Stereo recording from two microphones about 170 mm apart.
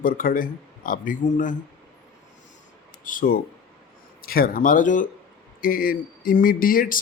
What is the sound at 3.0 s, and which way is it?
Speech, 50° left (ahead or behind).